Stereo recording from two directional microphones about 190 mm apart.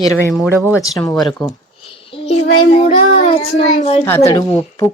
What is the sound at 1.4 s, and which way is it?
Speech, centre (ahead or behind).